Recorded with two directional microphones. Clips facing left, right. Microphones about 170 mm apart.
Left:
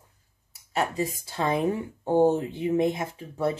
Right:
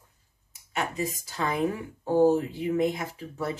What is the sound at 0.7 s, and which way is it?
Speech, 30° left (ahead or behind).